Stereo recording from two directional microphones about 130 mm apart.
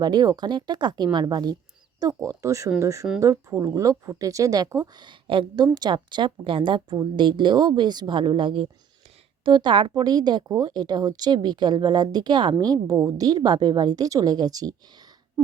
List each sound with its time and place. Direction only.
0.0 s speech: 30° right (ahead or behind)